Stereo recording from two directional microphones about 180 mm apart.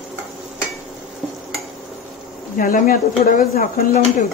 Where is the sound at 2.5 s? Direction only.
50° left (ahead or behind).